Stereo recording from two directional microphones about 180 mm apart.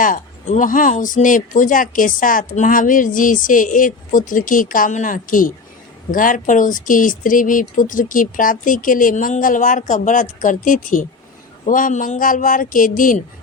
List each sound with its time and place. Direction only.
0.0 s speech: 45° left (ahead or behind)